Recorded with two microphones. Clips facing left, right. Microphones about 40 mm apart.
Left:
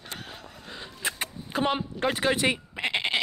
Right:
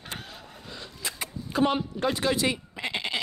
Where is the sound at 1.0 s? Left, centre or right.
Left.